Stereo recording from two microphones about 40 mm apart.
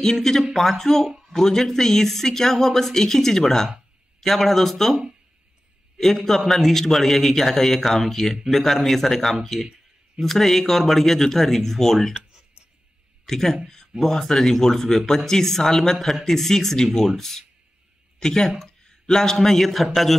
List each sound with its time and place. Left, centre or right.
0.0 s speech: centre
5.9 s speech: centre
13.2 s a man's voice: centre